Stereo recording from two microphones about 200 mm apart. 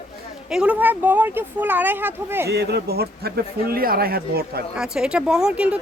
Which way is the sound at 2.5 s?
55° right (ahead or behind).